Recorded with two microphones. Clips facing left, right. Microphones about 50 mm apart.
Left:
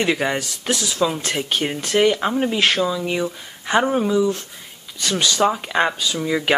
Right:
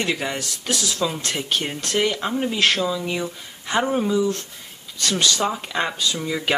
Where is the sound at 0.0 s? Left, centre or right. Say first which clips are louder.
Left 4 dB; centre.